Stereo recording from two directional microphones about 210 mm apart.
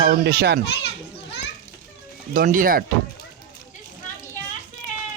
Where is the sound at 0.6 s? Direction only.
55° left (ahead or behind).